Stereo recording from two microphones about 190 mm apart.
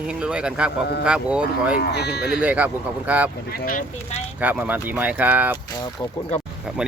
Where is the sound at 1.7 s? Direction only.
60° left (ahead or behind).